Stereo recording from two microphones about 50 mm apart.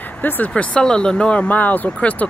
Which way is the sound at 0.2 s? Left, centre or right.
Left.